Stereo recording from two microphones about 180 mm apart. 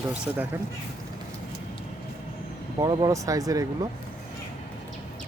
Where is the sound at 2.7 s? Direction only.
20° right (ahead or behind).